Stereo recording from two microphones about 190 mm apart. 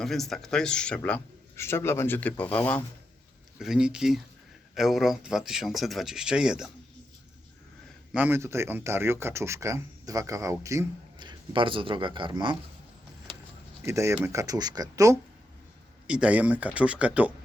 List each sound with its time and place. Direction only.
0.0 s speech: centre (ahead or behind)
3.6 s speech: 5° right (ahead or behind)
8.1 s speech: 10° right (ahead or behind); by 12.5 s 25° right (ahead or behind)
13.8 s speech: 15° right (ahead or behind)
16.0 s speech: 5° right (ahead or behind)